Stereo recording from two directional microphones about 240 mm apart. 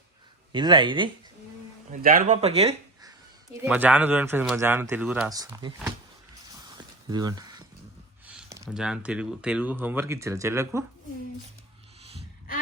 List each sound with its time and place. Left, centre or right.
0.5 s speech: centre
1.9 s speech: right
3.5 s speech: centre
7.1 s speech: centre
8.3 s a sound: centre
8.7 s speech: centre